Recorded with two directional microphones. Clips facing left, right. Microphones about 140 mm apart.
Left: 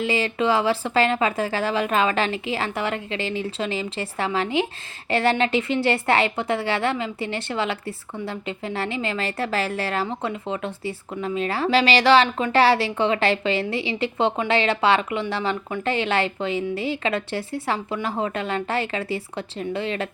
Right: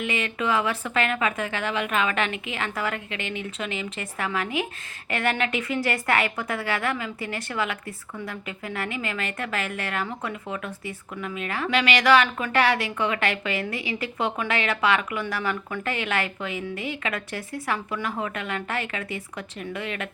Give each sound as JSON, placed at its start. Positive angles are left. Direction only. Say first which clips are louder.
{"t": 0.0, "sound": "a woman's voice", "louder": "left 5 dB", "side_deg": 30}